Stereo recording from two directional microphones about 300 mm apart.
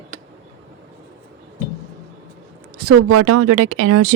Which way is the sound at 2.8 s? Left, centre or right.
Right.